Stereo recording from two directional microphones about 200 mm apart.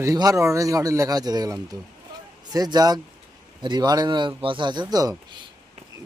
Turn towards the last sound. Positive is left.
turn(degrees=-20)  # may be behind; listen again after turning